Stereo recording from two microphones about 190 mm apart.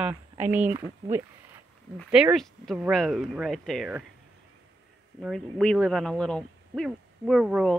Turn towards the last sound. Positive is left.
turn(degrees=0)  # may be behind; listen again after turning